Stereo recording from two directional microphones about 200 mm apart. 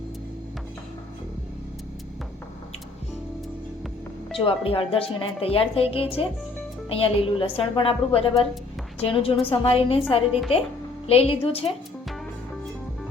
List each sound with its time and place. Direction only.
4.4 s speech: 25° left (ahead or behind)